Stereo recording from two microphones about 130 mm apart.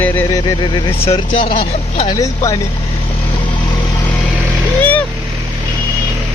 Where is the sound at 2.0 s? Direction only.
25° left (ahead or behind).